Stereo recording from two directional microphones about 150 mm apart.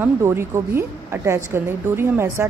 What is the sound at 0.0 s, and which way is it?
A woman's voice, 15° right (ahead or behind).